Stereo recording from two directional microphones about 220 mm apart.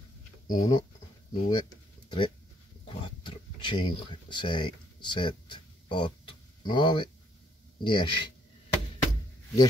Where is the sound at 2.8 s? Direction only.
20° left (ahead or behind).